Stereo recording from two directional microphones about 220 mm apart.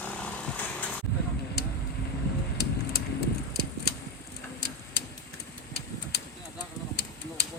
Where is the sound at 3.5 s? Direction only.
45° left (ahead or behind).